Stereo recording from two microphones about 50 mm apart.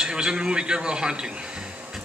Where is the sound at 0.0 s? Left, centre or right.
Centre.